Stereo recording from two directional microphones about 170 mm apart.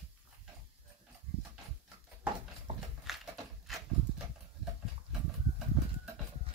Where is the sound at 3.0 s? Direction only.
Centre (ahead or behind).